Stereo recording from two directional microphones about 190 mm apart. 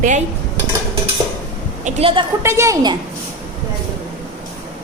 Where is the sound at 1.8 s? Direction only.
30° right (ahead or behind).